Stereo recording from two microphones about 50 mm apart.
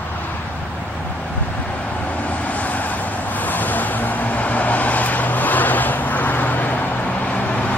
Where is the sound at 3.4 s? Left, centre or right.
Left.